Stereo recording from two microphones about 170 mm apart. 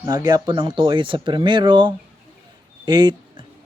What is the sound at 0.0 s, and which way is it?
A man's voice, 20° right (ahead or behind).